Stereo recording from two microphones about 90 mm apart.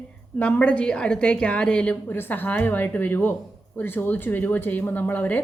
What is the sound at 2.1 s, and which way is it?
A woman's voice, 25° left (ahead or behind).